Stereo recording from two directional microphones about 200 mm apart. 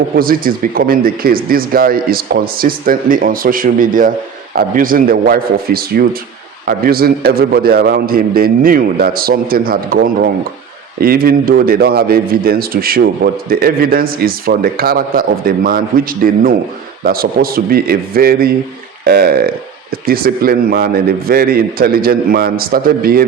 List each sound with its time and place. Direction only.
0.2 s a man's voice: 45° right (ahead or behind)